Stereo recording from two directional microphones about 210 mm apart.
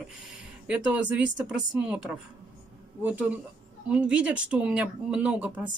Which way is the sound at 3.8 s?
5° right (ahead or behind).